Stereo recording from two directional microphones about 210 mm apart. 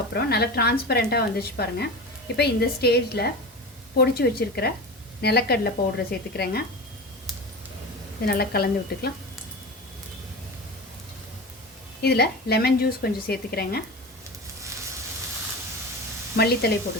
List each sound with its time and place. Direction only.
0.1 s a woman's voice: 50° left (ahead or behind)
8.3 s a woman's voice: 45° left (ahead or behind)
12.0 s a woman's voice: 50° left (ahead or behind)
16.3 s a woman's voice: 50° left (ahead or behind)